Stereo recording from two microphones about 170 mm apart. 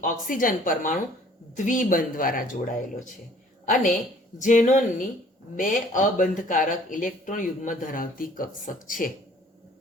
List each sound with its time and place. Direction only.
0.0 s speech: 50° left (ahead or behind)
4.4 s speech: 50° left (ahead or behind)